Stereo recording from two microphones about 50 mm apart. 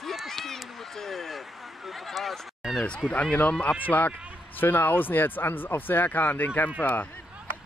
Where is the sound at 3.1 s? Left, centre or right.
Left.